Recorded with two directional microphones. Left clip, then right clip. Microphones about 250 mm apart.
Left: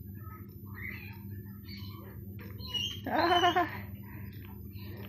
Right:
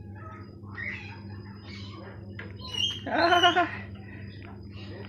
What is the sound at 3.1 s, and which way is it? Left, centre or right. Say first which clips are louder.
Cat: right 5 dB; left.